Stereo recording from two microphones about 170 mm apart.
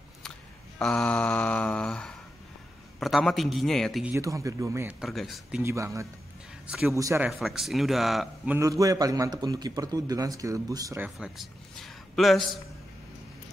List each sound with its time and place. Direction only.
0.7 s a sound: 5° left (ahead or behind)
3.0 s a man's voice: centre (ahead or behind)
4.1 s speech: 20° right (ahead or behind)
5.0 s a man's voice: centre (ahead or behind)
5.6 s speech: 15° right (ahead or behind)
6.7 s a man's voice: 5° right (ahead or behind)
7.0 s speech: 20° right (ahead or behind)
7.2 s a man's voice: centre (ahead or behind)
8.5 s speech: 20° right (ahead or behind)
11.1 s a sound: centre (ahead or behind)